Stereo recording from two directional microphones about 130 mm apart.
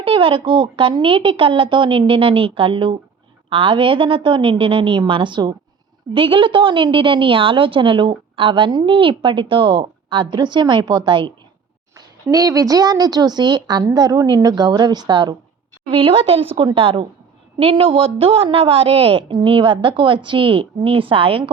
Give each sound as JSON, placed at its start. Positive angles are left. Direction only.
{"t": 0.0, "sound": "a woman's voice", "side_deg": -40}
{"t": 12.3, "sound": "a woman's voice", "side_deg": -25}
{"t": 15.9, "sound": "a woman's voice", "side_deg": -45}